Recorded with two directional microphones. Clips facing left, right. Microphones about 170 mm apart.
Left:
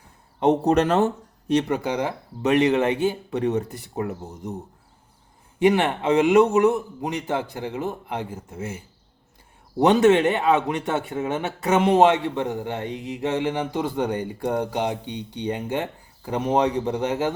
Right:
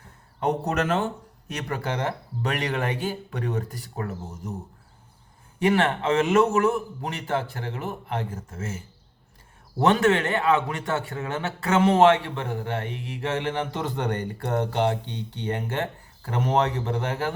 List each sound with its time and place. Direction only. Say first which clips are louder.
0.3 s speech: left 6 dB; 25° left (ahead or behind)
1.5 s speech: left 7 dB; 20° left (ahead or behind)
5.5 s speech: left 3 dB; 15° left (ahead or behind)